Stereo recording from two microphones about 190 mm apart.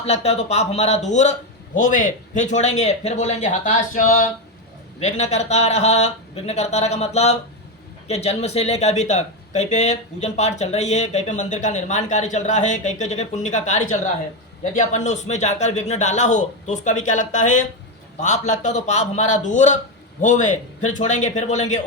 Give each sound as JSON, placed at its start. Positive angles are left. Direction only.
{"t": 0.0, "sound": "speech", "side_deg": 35}